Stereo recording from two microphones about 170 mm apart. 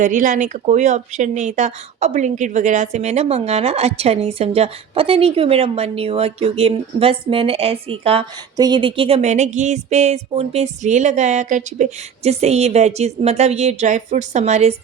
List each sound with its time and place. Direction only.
0.0 s speech: 50° right (ahead or behind)
8.5 s speech: 25° right (ahead or behind); by 14.8 s 40° right (ahead or behind)